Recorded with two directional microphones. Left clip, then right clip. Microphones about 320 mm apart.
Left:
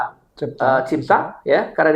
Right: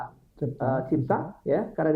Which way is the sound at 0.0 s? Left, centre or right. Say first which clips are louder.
Left 10 dB; centre.